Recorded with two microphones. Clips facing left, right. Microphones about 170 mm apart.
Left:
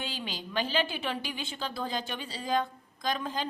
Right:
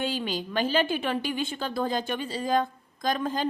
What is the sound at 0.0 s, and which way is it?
Speech, 50° right (ahead or behind).